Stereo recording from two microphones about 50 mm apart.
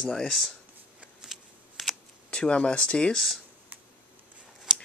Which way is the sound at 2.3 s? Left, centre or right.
Left.